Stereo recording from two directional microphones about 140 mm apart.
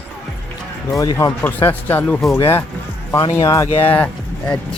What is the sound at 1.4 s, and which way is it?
Speech, 15° left (ahead or behind).